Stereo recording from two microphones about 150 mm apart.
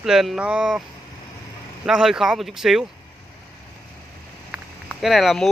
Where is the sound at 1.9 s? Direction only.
5° right (ahead or behind).